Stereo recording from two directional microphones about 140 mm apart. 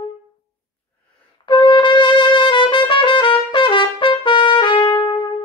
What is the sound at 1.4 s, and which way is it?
Trumpet, 35° left (ahead or behind).